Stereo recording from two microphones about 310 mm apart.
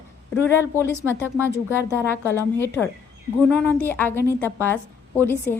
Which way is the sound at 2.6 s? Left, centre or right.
Centre.